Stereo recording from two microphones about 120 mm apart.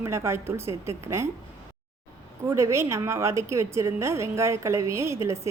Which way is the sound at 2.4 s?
25° right (ahead or behind).